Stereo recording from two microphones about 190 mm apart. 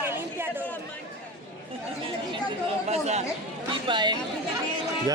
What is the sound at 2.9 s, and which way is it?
Speech, 35° right (ahead or behind).